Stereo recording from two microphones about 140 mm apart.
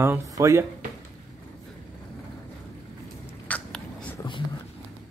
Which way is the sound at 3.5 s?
10° left (ahead or behind).